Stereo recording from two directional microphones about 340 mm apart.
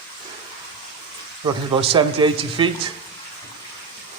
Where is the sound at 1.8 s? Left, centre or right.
Centre.